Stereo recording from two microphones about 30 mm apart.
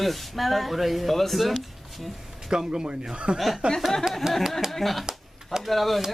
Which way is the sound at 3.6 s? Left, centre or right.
Right.